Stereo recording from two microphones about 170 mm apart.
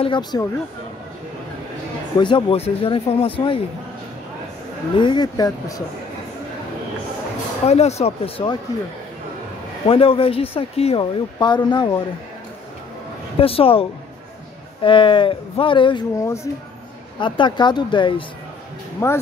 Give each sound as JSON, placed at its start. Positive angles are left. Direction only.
{"t": 0.0, "sound": "speech", "side_deg": 25}
{"t": 2.1, "sound": "speech", "side_deg": 30}
{"t": 4.9, "sound": "speech", "side_deg": 30}
{"t": 7.6, "sound": "speech", "side_deg": 40}
{"t": 9.8, "sound": "speech", "side_deg": 35}
{"t": 13.4, "sound": "speech", "side_deg": 35}
{"t": 19.0, "sound": "speech", "side_deg": 15}